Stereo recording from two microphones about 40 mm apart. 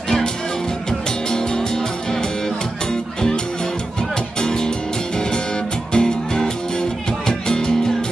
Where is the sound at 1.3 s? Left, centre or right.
Centre.